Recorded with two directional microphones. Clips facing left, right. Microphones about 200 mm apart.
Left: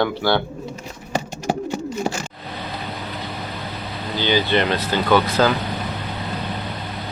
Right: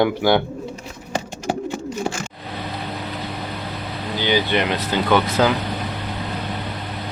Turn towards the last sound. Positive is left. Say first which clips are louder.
# even
turn(degrees=-20)  # may be behind; listen again after turning